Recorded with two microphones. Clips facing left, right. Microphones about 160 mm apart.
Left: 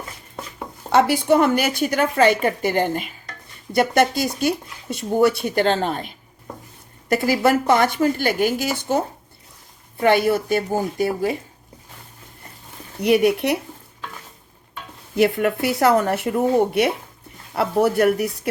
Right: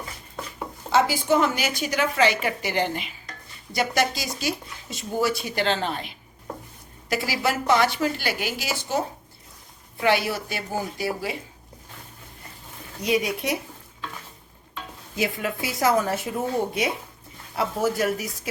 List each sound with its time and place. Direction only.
0.9 s a woman's voice: 60° left (ahead or behind)
10.0 s a woman's voice: 50° left (ahead or behind)
13.0 s speech: 65° left (ahead or behind)
15.1 s speech: 60° left (ahead or behind)
17.5 s speech: 65° left (ahead or behind)